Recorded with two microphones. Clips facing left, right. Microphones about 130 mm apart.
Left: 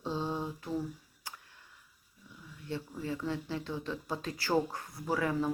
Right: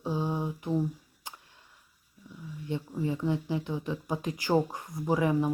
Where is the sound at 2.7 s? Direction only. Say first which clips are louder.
Right 5 dB; 20° right (ahead or behind).